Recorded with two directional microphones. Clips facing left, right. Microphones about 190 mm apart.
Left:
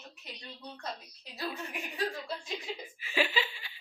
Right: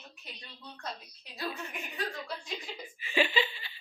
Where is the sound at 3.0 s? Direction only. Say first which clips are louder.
Right 3 dB; 5° left (ahead or behind).